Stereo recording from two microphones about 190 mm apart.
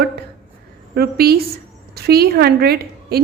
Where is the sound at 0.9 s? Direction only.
55° right (ahead or behind).